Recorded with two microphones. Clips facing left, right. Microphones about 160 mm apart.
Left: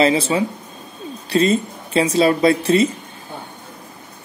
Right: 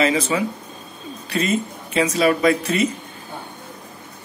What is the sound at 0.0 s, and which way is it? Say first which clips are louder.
Speech: left 3 dB; 30° left (ahead or behind).